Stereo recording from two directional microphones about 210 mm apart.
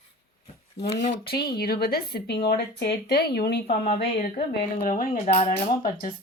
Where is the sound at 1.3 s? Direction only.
50° left (ahead or behind).